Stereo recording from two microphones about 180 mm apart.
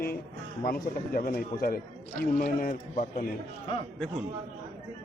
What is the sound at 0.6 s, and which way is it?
Speech, 50° left (ahead or behind).